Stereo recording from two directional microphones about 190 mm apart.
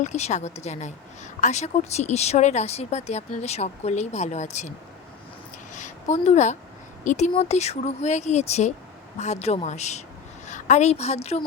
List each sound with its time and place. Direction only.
0.0 s speech: 40° left (ahead or behind)
5.7 s a woman's voice: 40° left (ahead or behind)